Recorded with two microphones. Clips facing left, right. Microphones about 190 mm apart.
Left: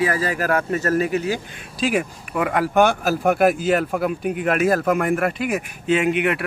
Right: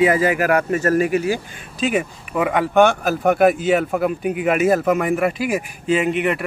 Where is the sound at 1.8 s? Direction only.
Centre (ahead or behind).